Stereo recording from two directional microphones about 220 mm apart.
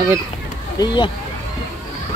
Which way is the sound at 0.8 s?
20° left (ahead or behind).